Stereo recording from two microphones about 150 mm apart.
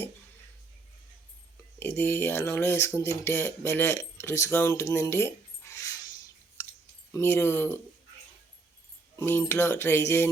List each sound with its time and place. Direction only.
2.0 s speech: 15° left (ahead or behind)
7.1 s speech: 15° left (ahead or behind)
9.1 s speech: 15° left (ahead or behind)